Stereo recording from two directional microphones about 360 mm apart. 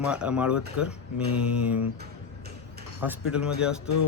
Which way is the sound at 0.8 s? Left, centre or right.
Left.